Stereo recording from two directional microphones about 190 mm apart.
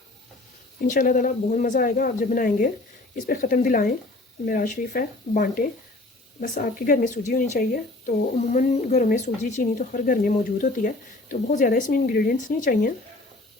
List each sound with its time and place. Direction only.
0.9 s a woman's voice: 45° left (ahead or behind)